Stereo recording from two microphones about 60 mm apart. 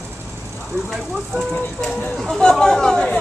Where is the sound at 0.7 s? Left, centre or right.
Right.